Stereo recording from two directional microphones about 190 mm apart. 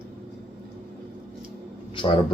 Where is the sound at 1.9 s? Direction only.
25° left (ahead or behind).